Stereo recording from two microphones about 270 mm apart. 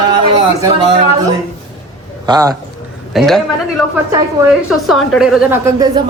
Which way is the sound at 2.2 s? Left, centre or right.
Centre.